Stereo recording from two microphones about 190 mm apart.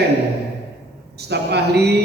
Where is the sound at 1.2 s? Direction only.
60° right (ahead or behind).